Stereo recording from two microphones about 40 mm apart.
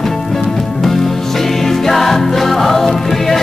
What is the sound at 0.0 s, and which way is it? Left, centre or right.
Music, centre.